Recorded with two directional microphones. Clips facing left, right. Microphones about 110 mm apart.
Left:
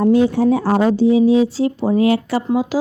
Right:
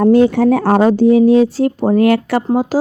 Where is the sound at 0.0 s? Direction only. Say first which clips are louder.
Right 4 dB; 65° right (ahead or behind).